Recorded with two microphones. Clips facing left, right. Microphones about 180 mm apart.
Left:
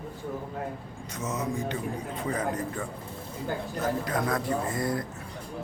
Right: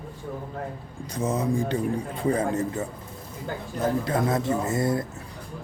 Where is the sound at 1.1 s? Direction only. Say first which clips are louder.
Right 6 dB; 30° right (ahead or behind).